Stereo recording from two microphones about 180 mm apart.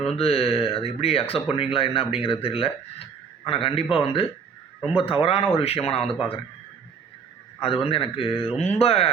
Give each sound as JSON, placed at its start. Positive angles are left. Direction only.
{"t": 0.2, "sound": "speech", "side_deg": 35}
{"t": 7.6, "sound": "speech", "side_deg": 30}